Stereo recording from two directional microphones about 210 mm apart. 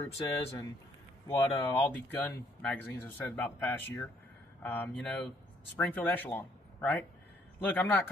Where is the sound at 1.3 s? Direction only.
20° left (ahead or behind).